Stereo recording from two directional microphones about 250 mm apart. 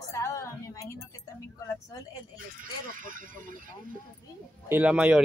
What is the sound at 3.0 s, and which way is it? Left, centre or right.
Speech, right.